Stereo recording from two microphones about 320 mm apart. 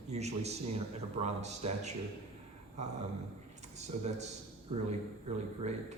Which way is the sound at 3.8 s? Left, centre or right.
Right.